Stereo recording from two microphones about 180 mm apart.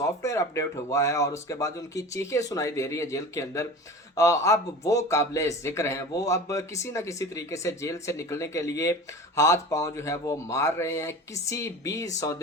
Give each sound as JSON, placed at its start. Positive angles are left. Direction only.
{"t": 0.2, "sound": "a man's voice", "side_deg": 15}